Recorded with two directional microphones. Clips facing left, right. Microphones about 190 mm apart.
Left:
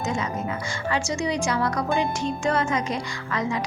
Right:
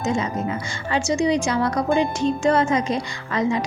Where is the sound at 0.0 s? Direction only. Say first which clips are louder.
Right 4 dB; 25° right (ahead or behind).